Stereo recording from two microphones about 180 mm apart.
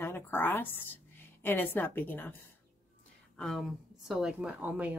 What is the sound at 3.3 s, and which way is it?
Speech, centre (ahead or behind).